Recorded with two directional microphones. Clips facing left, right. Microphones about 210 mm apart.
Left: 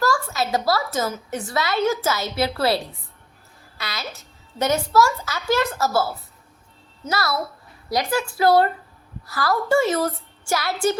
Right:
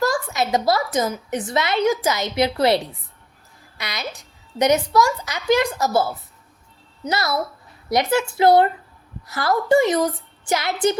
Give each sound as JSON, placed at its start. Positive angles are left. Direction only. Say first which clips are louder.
{"t": 0.0, "sound": "a woman's voice", "louder": "right 1 dB", "side_deg": -20}